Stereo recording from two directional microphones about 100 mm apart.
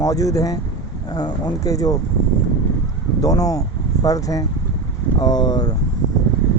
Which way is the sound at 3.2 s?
35° left (ahead or behind).